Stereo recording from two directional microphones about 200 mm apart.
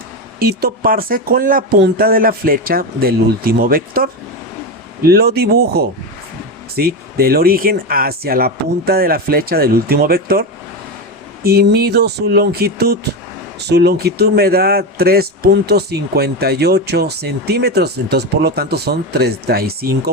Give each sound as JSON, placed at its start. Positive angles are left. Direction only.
{"t": 0.3, "sound": "speech", "side_deg": -50}
{"t": 11.4, "sound": "speech", "side_deg": -50}